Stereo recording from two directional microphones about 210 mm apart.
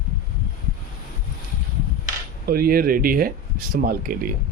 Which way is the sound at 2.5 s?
45° right (ahead or behind).